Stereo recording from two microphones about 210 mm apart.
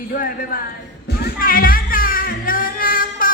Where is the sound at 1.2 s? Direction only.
40° left (ahead or behind).